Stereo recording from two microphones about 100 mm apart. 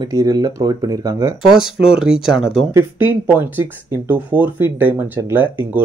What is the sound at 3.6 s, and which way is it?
Speech, 20° right (ahead or behind).